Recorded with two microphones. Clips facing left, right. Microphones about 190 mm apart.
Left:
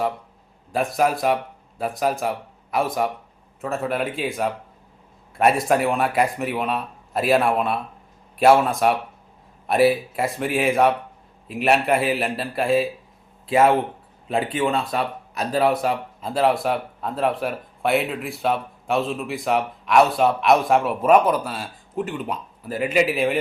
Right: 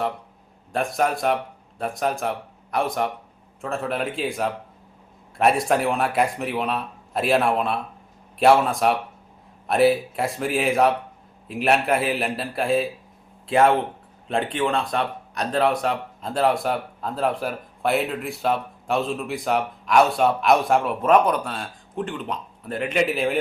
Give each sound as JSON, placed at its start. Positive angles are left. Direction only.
{"t": 0.7, "sound": "speech", "side_deg": 0}